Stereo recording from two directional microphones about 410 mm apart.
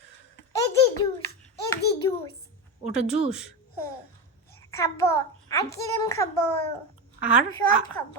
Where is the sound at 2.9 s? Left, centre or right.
Centre.